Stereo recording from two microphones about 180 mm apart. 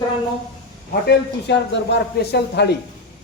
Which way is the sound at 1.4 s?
75° left (ahead or behind).